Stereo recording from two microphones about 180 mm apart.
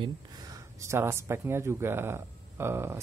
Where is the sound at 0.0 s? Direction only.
20° right (ahead or behind).